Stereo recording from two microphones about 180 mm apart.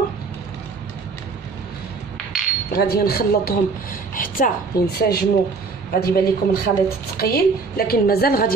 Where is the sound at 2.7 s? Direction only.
60° left (ahead or behind).